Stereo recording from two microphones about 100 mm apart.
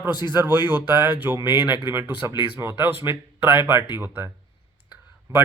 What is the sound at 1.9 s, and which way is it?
Speech, 25° right (ahead or behind).